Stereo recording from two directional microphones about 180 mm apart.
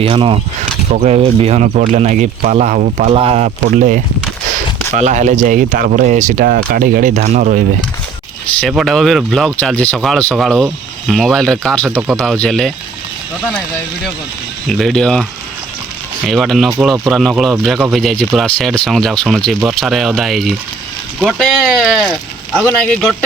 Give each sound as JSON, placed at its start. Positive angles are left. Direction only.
{"t": 0.0, "sound": "speech", "side_deg": -30}
{"t": 8.6, "sound": "speech", "side_deg": 0}
{"t": 14.7, "sound": "speech", "side_deg": 0}